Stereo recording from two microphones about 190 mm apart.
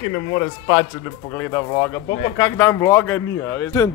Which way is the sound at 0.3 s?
15° left (ahead or behind).